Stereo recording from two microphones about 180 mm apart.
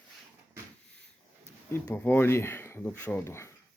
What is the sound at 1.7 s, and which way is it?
Speech, 10° left (ahead or behind).